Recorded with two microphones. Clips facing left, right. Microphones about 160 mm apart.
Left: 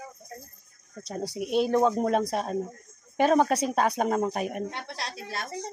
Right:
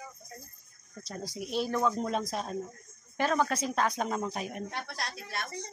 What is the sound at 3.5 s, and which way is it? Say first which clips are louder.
Speech: left 5 dB; 60° left (ahead or behind).